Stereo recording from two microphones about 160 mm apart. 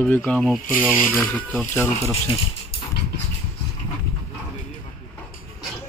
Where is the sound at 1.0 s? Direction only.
Centre (ahead or behind).